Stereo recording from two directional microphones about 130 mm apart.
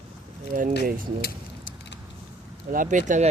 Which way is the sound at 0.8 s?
90° right.